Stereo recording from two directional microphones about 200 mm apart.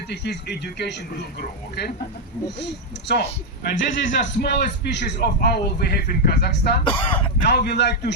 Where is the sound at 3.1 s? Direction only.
55° left (ahead or behind).